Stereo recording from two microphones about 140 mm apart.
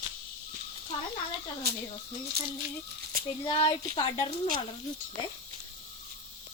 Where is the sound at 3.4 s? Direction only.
40° left (ahead or behind).